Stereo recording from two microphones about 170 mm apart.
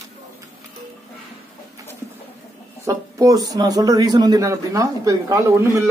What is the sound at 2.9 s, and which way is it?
Speech, 20° right (ahead or behind).